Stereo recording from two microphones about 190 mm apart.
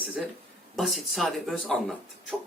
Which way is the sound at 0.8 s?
Centre (ahead or behind).